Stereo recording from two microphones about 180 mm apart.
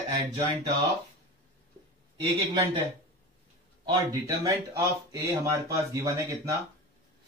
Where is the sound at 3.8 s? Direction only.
20° right (ahead or behind).